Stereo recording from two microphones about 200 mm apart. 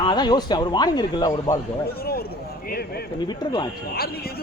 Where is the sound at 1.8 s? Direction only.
50° left (ahead or behind).